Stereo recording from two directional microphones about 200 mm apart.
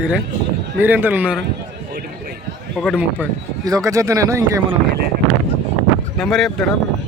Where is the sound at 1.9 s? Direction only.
50° right (ahead or behind).